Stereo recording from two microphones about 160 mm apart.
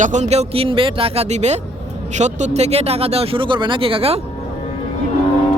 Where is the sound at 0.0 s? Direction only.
50° right (ahead or behind).